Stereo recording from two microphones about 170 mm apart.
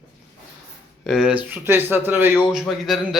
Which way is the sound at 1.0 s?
Centre (ahead or behind).